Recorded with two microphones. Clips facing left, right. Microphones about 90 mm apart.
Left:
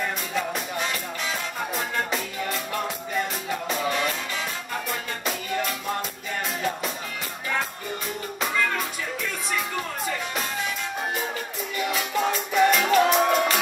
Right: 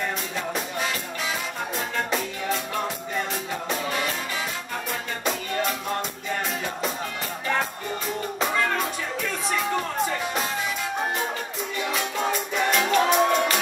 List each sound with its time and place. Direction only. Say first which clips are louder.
2.0 s music: right 2 dB; centre (ahead or behind)
11.8 s music: left 2 dB; 5° left (ahead or behind)